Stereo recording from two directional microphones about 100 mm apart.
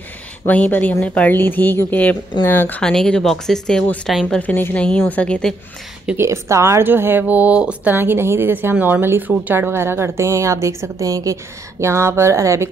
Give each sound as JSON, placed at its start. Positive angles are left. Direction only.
{"t": 0.5, "sound": "a woman's voice", "side_deg": 15}
{"t": 2.8, "sound": "a woman's voice", "side_deg": 5}
{"t": 4.1, "sound": "speech", "side_deg": 0}
{"t": 4.4, "sound": "a woman's voice", "side_deg": 15}
{"t": 6.1, "sound": "speech", "side_deg": -30}